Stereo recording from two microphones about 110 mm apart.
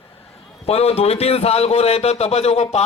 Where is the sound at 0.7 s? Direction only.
65° left (ahead or behind).